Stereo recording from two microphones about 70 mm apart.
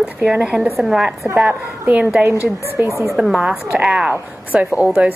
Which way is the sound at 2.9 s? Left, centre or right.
Left.